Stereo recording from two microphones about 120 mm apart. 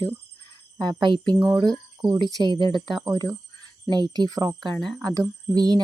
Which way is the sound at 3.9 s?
35° right (ahead or behind).